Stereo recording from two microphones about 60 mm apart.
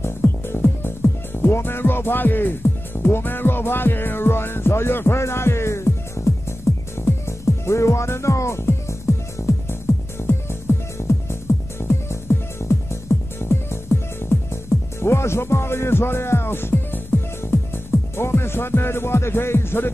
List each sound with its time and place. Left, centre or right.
0.0 s music: left
10.2 s music: left
18.1 s speech: left